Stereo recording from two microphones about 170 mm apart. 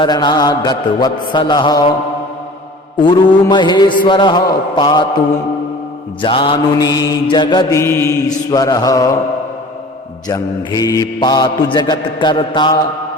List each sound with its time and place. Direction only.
0.0 s mantra: 25° left (ahead or behind)
3.0 s mantra: 25° left (ahead or behind)
6.2 s mantra: 30° left (ahead or behind)
10.2 s mantra: 20° left (ahead or behind)